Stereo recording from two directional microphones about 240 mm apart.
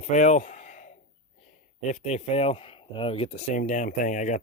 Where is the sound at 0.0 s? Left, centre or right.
Left.